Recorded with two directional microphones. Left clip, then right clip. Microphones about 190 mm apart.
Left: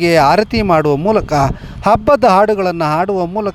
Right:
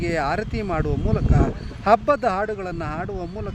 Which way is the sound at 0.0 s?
40° left (ahead or behind).